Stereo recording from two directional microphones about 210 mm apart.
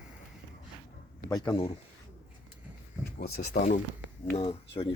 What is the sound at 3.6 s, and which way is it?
Speech, 35° left (ahead or behind).